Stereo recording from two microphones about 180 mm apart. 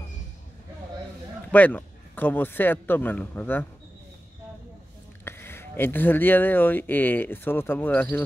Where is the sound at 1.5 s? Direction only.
10° left (ahead or behind).